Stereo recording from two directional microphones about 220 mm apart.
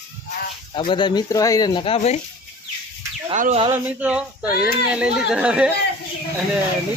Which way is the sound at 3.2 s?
30° right (ahead or behind).